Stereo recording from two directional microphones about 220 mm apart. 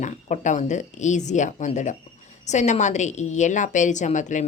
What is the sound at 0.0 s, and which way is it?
A woman's voice, 35° left (ahead or behind).